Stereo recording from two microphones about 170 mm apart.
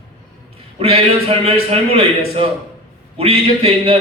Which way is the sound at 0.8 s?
35° right (ahead or behind).